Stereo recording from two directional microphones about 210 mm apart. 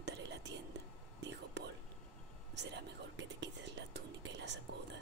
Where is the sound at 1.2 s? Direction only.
55° right (ahead or behind).